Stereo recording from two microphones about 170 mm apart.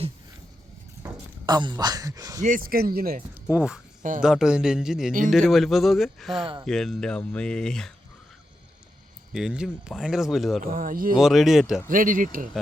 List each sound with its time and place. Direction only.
1.0 s speech: 25° right (ahead or behind)
2.4 s speech: 55° right (ahead or behind)
3.4 s speech: 5° right (ahead or behind)
9.3 s speech: 5° right (ahead or behind)
10.7 s speech: 55° right (ahead or behind)
11.2 s speech: centre (ahead or behind)
11.9 s speech: 50° right (ahead or behind)